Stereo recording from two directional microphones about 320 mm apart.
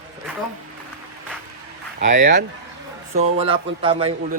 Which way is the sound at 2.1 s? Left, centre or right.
Right.